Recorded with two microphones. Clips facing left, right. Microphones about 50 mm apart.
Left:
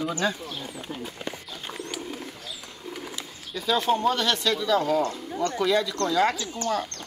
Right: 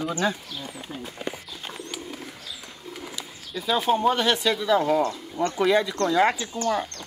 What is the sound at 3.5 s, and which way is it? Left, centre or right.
Speech, centre.